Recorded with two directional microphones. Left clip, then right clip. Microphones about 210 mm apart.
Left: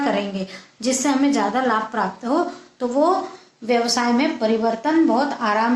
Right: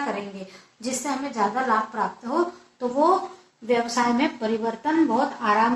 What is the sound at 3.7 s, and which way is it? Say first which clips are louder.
A woman's voice: left 3 dB; 45° left (ahead or behind).